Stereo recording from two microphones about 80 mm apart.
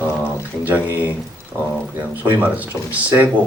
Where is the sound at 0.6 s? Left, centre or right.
Right.